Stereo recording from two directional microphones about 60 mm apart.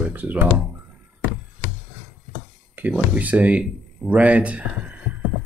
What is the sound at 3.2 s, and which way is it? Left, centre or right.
Speech, right.